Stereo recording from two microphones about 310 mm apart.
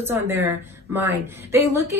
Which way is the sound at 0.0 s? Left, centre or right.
Centre.